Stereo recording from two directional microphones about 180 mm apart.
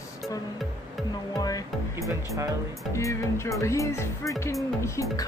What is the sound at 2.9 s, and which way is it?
Speech, 15° left (ahead or behind).